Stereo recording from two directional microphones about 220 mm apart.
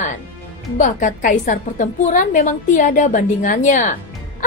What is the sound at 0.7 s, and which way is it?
A woman's voice, 35° left (ahead or behind).